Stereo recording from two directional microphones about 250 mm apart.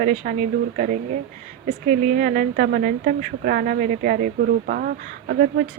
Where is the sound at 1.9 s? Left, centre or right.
Right.